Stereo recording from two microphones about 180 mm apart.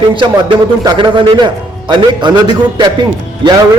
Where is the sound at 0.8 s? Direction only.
25° right (ahead or behind).